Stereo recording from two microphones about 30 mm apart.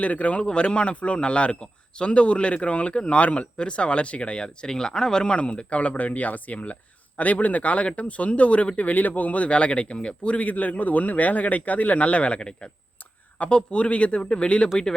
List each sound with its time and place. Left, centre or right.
0.0 s speech: left
0.4 s speech: left
3.6 s speech: left
5.4 s speech: left
10.4 s speech: left
12.4 s speech: left